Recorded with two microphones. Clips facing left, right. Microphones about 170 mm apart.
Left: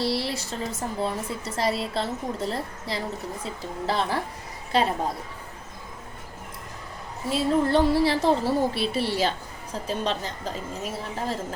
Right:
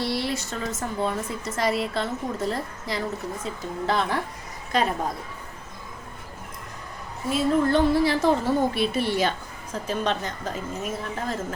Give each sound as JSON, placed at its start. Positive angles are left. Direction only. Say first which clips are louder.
{"t": 0.0, "sound": "a woman's voice", "louder": "even", "side_deg": 30}
{"t": 7.3, "sound": "a woman's voice", "louder": "right 1 dB", "side_deg": 30}